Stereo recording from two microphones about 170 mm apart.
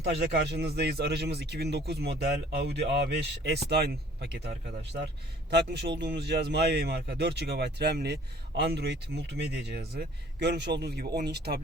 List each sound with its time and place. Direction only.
0.0 s speech: 70° right (ahead or behind)